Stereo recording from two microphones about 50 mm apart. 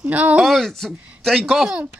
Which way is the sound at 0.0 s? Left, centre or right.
Right.